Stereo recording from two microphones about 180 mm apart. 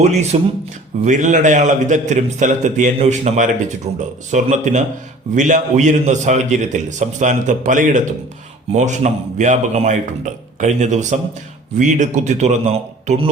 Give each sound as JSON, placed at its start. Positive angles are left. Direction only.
{"t": 0.0, "sound": "a man's voice", "side_deg": -40}